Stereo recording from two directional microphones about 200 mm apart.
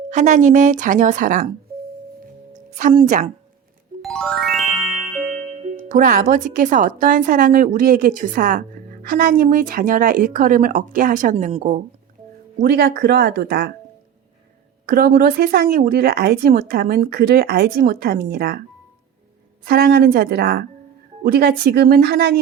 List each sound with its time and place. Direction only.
0.1 s speech: 35° right (ahead or behind)
2.5 s music: 40° right (ahead or behind)
4.0 s music: centre (ahead or behind)
5.3 s speech: 45° right (ahead or behind)
12.5 s speech: 50° right (ahead or behind)
14.8 s speech: 50° right (ahead or behind)
19.6 s speech: 50° right (ahead or behind)